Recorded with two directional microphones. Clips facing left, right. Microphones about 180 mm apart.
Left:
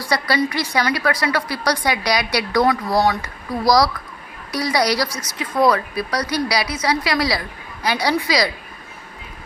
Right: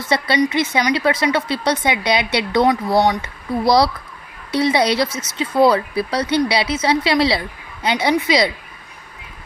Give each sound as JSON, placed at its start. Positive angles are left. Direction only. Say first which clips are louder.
{"t": 0.0, "sound": "speech", "louder": "right 2 dB", "side_deg": -25}